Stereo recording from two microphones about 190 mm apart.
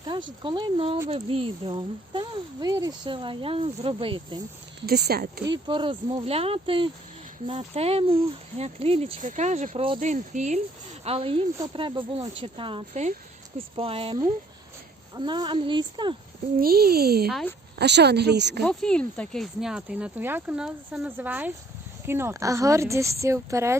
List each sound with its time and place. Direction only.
0.0 s speech: 25° right (ahead or behind)
4.9 s speech: 55° right (ahead or behind)
5.5 s speech: 25° right (ahead or behind)
16.6 s speech: 55° right (ahead or behind)
17.2 s speech: centre (ahead or behind)
17.7 s speech: 60° right (ahead or behind)
18.6 s speech: 5° left (ahead or behind); by 23.7 s 15° right (ahead or behind)